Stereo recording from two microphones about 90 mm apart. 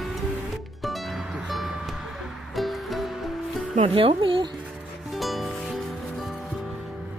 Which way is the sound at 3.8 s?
90° right.